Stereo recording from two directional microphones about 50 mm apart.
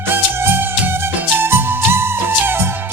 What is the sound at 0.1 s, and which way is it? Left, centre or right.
Music, right.